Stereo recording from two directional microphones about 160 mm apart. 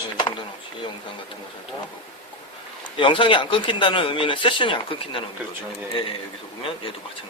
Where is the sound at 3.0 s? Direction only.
30° left (ahead or behind).